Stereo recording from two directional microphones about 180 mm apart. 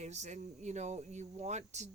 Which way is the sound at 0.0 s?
40° right (ahead or behind).